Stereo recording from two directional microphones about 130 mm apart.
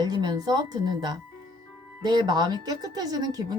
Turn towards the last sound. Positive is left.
turn(degrees=-30)  # may be behind; listen again after turning